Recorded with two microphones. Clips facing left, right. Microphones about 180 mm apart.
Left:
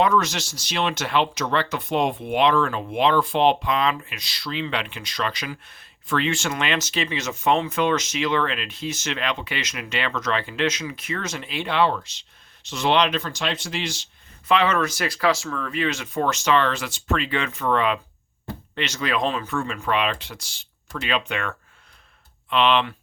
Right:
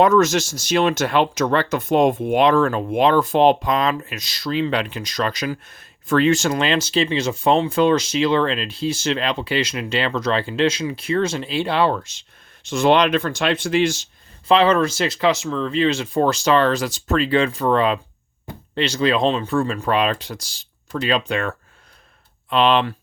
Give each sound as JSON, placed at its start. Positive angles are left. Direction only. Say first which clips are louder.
{"t": 0.0, "sound": "speech", "louder": "right 6 dB", "side_deg": -45}
{"t": 14.4, "sound": "speech", "louder": "right 5 dB", "side_deg": -30}